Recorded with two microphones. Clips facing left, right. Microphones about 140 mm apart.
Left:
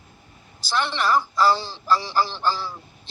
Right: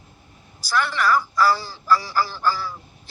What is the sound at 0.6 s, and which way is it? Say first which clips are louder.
A man's voice: right 2 dB; 25° left (ahead or behind).